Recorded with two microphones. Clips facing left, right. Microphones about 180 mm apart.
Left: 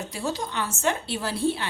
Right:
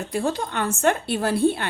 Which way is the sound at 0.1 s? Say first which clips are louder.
Right 7 dB; 55° right (ahead or behind).